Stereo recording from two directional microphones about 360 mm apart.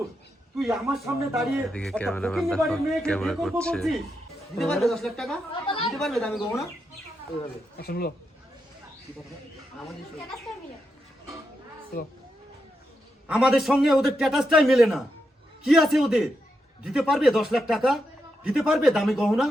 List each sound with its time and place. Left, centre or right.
0.5 s a man's voice: centre
5.6 s a woman's voice: centre
5.9 s a man's voice: centre
7.8 s speech: left
13.2 s a man's voice: centre